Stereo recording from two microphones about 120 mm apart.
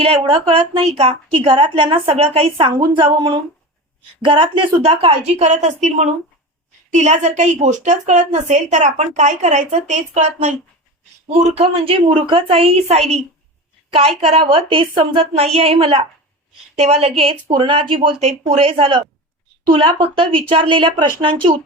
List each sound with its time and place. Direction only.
0.0 s a woman's voice: 45° right (ahead or behind)
1.3 s a woman's voice: 45° right (ahead or behind)
5.4 s a woman's voice: 80° right; by 15.3 s 45° right (ahead or behind)
15.3 s a woman's voice: 60° right (ahead or behind)
16.7 s a woman's voice: 65° right (ahead or behind)
17.5 s a woman's voice: 45° right (ahead or behind)
18.2 s a woman's voice: 65° right (ahead or behind); by 21.5 s 45° right (ahead or behind)